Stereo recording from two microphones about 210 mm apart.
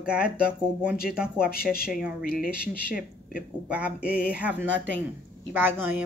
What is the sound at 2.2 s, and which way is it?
Speech, 45° left (ahead or behind).